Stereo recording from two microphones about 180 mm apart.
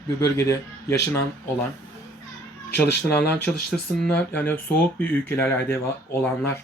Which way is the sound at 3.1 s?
10° left (ahead or behind).